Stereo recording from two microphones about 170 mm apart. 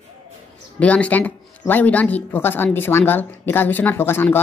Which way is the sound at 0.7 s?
10° left (ahead or behind).